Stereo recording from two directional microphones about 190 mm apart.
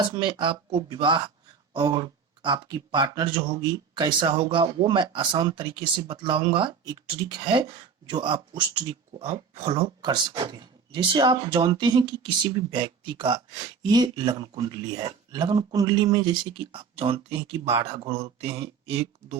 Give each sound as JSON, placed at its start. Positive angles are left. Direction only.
{"t": 0.1, "sound": "speech", "side_deg": -25}